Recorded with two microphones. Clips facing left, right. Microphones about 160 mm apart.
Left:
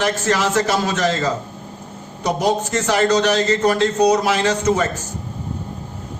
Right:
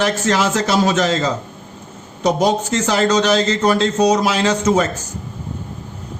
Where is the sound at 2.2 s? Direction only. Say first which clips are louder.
Right 3 dB; 90° right.